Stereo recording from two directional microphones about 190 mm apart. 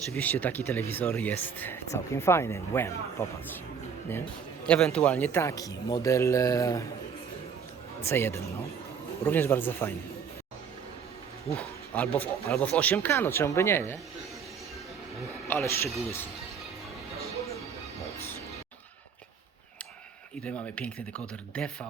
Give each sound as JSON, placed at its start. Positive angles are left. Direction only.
{"t": 0.1, "sound": "speech", "side_deg": 10}
{"t": 4.6, "sound": "a man's voice", "side_deg": 5}
{"t": 8.0, "sound": "speech", "side_deg": 10}
{"t": 12.2, "sound": "speech", "side_deg": 5}
{"t": 15.4, "sound": "speech", "side_deg": 10}
{"t": 20.4, "sound": "speech", "side_deg": 5}